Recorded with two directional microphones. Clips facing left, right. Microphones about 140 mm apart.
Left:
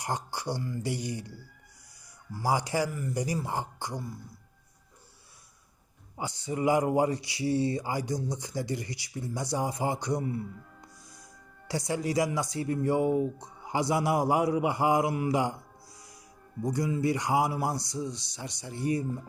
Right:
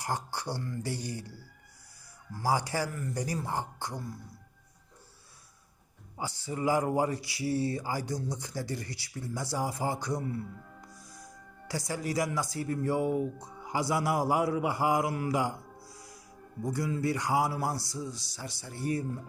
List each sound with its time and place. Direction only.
0.0 s speech: 15° left (ahead or behind)
2.3 s speech: 15° left (ahead or behind)
6.1 s speech: 20° left (ahead or behind)